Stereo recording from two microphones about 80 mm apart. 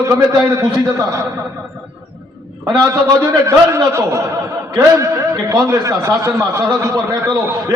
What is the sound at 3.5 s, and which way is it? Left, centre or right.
Speech, right.